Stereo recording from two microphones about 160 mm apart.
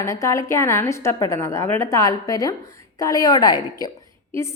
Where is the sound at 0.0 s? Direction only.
20° left (ahead or behind).